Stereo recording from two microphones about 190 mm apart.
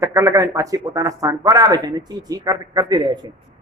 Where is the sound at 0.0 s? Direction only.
15° right (ahead or behind).